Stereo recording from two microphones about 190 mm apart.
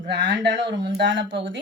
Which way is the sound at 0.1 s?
70° right (ahead or behind).